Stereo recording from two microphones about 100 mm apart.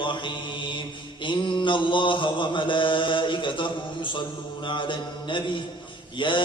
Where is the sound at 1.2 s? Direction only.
55° left (ahead or behind).